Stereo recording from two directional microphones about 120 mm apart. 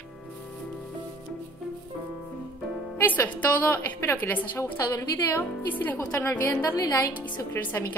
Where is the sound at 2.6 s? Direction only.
Centre (ahead or behind).